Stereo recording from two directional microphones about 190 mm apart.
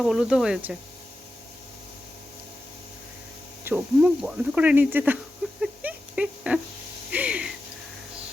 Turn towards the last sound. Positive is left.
turn(degrees=-5)  # may be behind; listen again after turning